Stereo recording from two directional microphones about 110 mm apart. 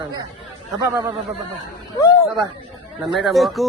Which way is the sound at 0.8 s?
35° right (ahead or behind).